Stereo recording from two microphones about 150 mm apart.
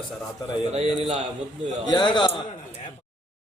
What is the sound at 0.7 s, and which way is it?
Speech, 45° right (ahead or behind).